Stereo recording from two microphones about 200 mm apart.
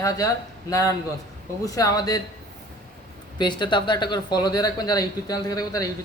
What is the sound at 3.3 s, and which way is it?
Speech, 20° left (ahead or behind).